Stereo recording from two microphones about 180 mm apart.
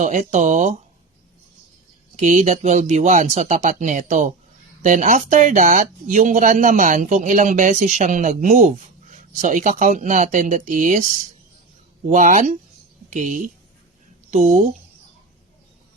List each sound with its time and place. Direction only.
0.0 s speech: 45° right (ahead or behind)
2.1 s speech: 40° right (ahead or behind)
12.0 s speech: 45° right (ahead or behind)